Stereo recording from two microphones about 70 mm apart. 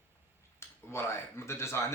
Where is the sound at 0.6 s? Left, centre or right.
Left.